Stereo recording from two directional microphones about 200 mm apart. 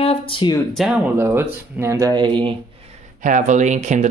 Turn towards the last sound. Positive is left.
turn(degrees=-35)  # may be behind; listen again after turning